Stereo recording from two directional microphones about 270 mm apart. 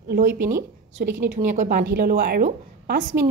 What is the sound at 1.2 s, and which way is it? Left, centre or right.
A woman's voice, right.